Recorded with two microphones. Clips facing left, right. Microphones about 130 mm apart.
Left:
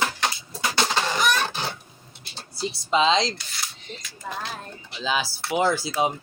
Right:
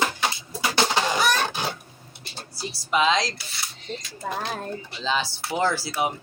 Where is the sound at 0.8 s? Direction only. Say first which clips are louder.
Right 1 dB; 15° right (ahead or behind).